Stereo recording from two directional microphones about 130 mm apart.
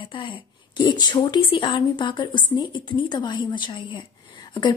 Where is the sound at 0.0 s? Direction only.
40° left (ahead or behind).